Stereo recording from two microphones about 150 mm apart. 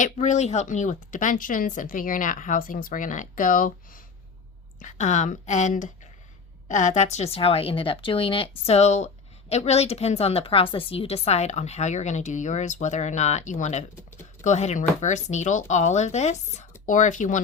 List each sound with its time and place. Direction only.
0.0 s a woman's voice: 50° left (ahead or behind); by 4.0 s 65° left (ahead or behind)
4.8 s a woman's voice: 50° left (ahead or behind)